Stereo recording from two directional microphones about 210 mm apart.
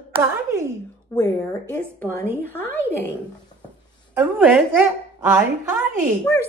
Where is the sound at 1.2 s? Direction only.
10° left (ahead or behind).